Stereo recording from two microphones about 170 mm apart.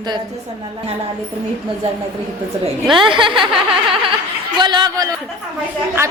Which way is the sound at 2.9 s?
30° right (ahead or behind).